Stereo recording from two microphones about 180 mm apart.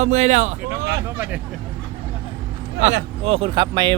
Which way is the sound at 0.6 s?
10° right (ahead or behind).